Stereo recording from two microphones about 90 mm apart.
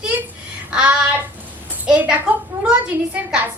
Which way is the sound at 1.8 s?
10° right (ahead or behind).